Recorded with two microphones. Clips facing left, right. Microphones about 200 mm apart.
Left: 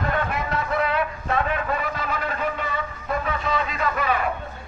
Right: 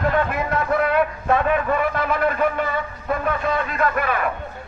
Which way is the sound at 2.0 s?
55° right (ahead or behind).